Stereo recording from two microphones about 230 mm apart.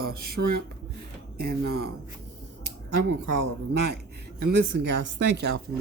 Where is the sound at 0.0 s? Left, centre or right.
Right.